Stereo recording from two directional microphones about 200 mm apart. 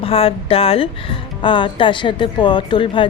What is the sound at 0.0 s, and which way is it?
A woman's voice, 30° left (ahead or behind).